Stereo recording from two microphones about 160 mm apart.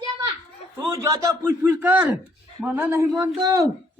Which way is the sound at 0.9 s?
20° right (ahead or behind).